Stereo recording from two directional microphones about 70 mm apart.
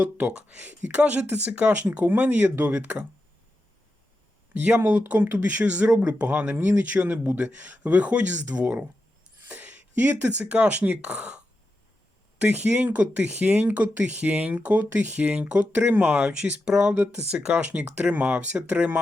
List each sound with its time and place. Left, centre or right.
0.0 s speech: right
4.5 s speech: right